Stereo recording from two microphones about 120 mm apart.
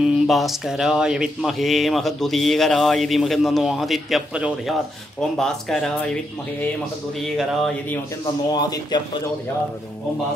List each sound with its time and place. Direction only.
0.0 s speech: centre (ahead or behind)
5.4 s speech: 5° left (ahead or behind)
7.2 s speech: centre (ahead or behind)
8.5 s speech: 35° left (ahead or behind)